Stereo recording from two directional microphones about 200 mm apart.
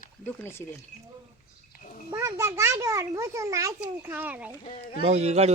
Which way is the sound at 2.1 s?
15° right (ahead or behind).